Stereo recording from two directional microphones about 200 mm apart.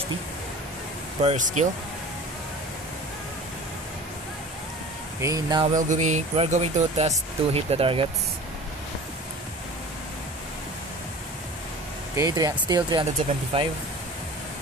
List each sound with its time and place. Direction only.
1.2 s speech: 35° right (ahead or behind)
5.2 s speech: 20° right (ahead or behind)
5.8 s speech: 40° right (ahead or behind)
12.2 s speech: 15° right (ahead or behind)